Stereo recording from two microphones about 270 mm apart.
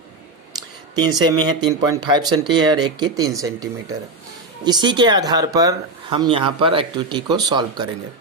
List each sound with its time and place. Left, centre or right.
0.9 s speech: centre